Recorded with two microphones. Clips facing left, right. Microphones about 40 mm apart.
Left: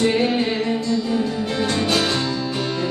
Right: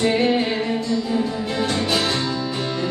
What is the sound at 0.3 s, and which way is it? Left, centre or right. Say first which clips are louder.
Music: even; centre.